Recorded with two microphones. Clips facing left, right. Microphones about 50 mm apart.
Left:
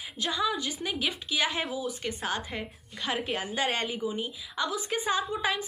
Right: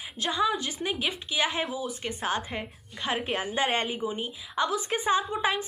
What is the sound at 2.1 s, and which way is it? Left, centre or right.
A woman's voice, right.